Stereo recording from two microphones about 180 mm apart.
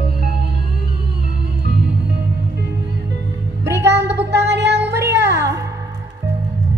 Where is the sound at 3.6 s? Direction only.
70° right (ahead or behind).